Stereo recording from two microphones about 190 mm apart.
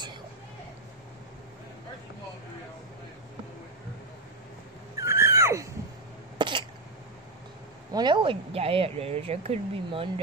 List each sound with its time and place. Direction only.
4.9 s a sound: 15° right (ahead or behind)
6.3 s cough: 25° right (ahead or behind)
7.9 s speech: 25° right (ahead or behind)